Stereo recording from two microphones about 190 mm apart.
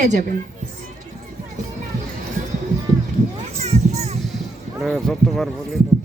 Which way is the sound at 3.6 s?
35° right (ahead or behind).